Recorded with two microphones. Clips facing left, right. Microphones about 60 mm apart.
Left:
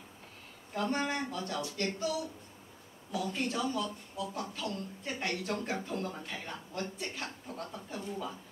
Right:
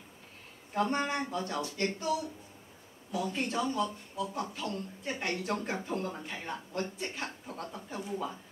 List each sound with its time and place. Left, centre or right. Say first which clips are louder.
0.7 s a man's voice: right 2 dB; right